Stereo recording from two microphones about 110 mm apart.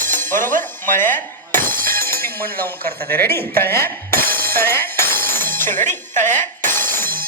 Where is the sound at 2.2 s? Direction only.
20° left (ahead or behind).